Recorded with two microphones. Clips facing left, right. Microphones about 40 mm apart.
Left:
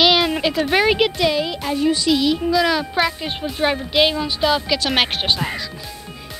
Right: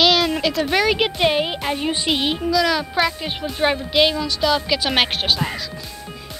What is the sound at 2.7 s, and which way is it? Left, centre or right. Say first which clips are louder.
Speech: left 1 dB; centre.